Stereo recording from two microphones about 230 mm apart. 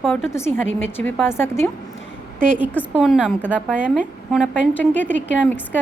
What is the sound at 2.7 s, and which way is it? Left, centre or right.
Speech, centre.